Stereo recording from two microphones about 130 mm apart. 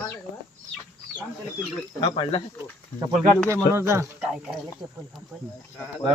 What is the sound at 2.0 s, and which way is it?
Speech, 35° left (ahead or behind).